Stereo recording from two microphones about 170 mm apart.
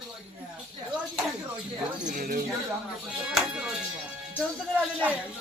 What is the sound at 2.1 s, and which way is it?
Speech, 55° right (ahead or behind).